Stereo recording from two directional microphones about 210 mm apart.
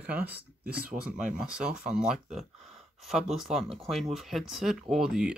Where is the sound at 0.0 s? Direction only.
10° right (ahead or behind).